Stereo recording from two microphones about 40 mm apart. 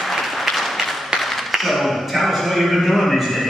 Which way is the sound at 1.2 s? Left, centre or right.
Centre.